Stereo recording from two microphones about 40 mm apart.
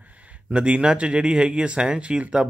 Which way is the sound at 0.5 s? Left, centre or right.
Right.